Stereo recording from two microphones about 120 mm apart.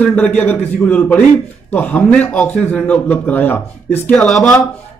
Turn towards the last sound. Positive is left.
turn(degrees=0)  # may be behind; listen again after turning